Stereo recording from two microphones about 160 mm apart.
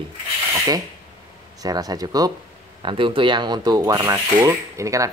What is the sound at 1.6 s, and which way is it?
Speech, 25° right (ahead or behind).